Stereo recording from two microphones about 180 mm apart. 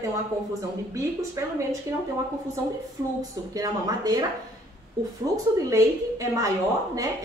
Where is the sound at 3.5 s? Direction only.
20° right (ahead or behind).